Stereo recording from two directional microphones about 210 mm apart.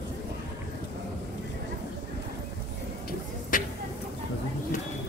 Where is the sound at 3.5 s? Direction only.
40° left (ahead or behind).